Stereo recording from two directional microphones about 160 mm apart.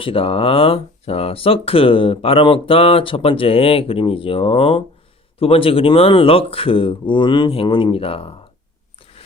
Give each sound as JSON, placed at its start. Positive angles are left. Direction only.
{"t": 0.0, "sound": "speech", "side_deg": 35}